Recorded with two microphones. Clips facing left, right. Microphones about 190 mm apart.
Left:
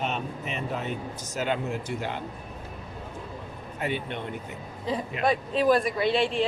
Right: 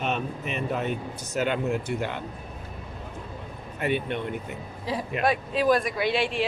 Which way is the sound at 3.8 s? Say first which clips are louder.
Right 4 dB; 60° right (ahead or behind).